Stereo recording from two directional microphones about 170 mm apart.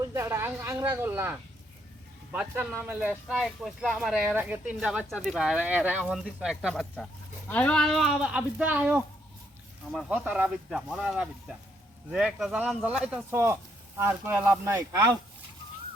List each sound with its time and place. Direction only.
0.1 s speech: 15° right (ahead or behind)
6.9 s speech: 10° left (ahead or behind); by 15.1 s 15° right (ahead or behind)